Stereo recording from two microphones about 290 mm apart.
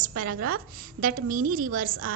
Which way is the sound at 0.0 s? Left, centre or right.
Right.